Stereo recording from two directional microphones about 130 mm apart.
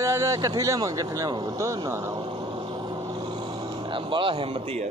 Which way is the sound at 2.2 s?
40° right (ahead or behind).